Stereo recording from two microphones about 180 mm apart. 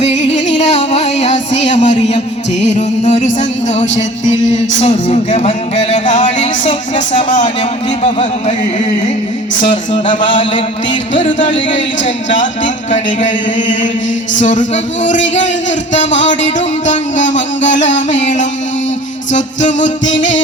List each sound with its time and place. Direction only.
0.0 s music: 40° left (ahead or behind)
11.7 s a man's voice: 45° left (ahead or behind)
16.6 s music: 45° left (ahead or behind)
19.3 s a man's voice: 40° left (ahead or behind)
20.1 s music: 90° left